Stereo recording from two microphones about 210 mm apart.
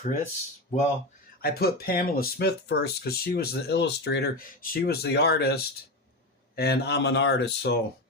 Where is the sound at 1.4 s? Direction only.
45° left (ahead or behind).